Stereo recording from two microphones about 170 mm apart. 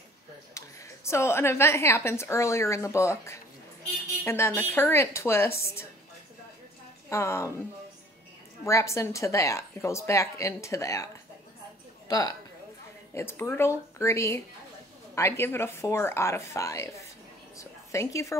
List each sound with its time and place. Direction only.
0.6 s a woman's voice: 15° left (ahead or behind)
7.1 s a woman's voice: 15° left (ahead or behind)
8.6 s a woman's voice: 15° left (ahead or behind)
12.1 s a woman's voice: 20° left (ahead or behind)